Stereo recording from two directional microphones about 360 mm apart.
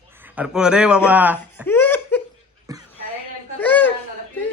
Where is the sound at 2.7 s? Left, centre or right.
Centre.